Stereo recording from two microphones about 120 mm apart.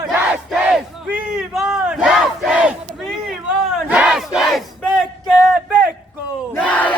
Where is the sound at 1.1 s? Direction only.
10° right (ahead or behind).